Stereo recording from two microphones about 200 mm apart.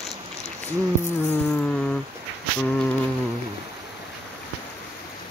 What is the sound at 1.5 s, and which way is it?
Cat, 5° left (ahead or behind).